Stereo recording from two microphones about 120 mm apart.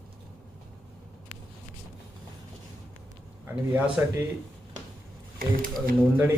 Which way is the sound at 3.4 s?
10° right (ahead or behind).